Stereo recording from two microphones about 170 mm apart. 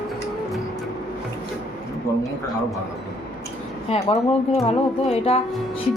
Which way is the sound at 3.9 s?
35° left (ahead or behind).